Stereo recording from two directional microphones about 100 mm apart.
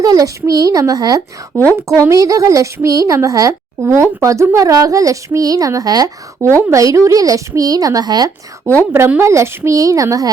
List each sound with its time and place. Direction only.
0.0 s speech: 35° right (ahead or behind)
8.9 s speech: 20° right (ahead or behind)